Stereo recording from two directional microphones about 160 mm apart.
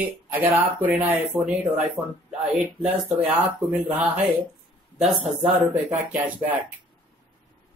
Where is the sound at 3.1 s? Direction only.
10° right (ahead or behind).